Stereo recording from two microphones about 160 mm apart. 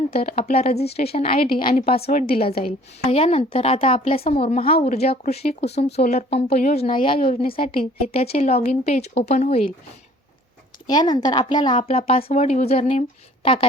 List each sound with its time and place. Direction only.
0.1 s speech: 40° left (ahead or behind)
1.5 s a woman's voice: 65° left (ahead or behind)
2.6 s speech: 35° left (ahead or behind)
10.8 s speech: 25° left (ahead or behind)